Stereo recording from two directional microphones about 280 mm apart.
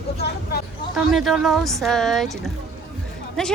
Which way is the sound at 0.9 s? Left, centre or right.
Centre.